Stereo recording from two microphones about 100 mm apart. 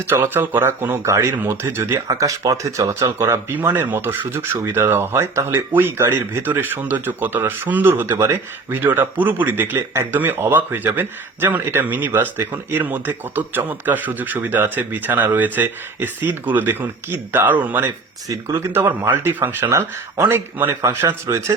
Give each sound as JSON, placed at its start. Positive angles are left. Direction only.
{"t": 0.1, "sound": "speech", "side_deg": -20}
{"t": 18.3, "sound": "speech", "side_deg": -30}